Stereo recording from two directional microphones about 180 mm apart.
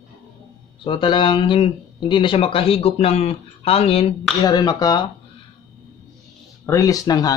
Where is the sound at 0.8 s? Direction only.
25° left (ahead or behind).